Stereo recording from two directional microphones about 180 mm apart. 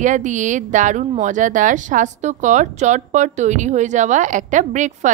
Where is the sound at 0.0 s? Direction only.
45° right (ahead or behind).